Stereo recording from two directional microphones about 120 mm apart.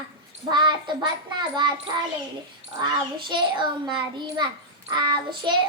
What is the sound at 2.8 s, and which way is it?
A child's voice, 40° right (ahead or behind).